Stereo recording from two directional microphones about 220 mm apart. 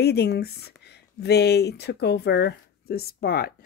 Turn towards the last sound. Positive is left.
turn(degrees=45)  # may be behind; listen again after turning